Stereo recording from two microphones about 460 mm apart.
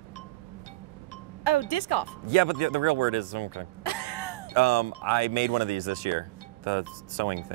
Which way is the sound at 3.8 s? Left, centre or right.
Left.